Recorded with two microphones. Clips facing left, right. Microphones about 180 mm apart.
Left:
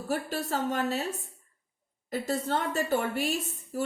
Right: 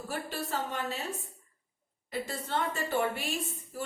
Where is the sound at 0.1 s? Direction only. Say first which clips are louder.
Left 5 dB; 40° left (ahead or behind).